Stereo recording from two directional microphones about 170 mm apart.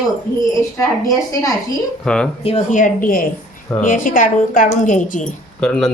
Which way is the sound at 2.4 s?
40° left (ahead or behind).